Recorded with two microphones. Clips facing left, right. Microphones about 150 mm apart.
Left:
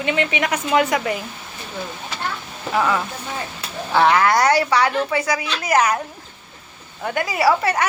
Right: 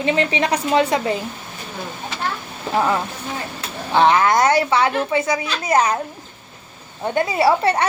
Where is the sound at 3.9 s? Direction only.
20° right (ahead or behind).